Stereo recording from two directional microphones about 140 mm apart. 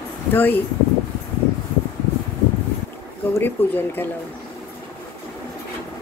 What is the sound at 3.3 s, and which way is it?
Speech, 15° left (ahead or behind).